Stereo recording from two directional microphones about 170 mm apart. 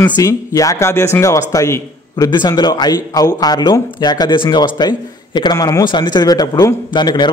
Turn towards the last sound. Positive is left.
turn(degrees=25)  # may be behind; listen again after turning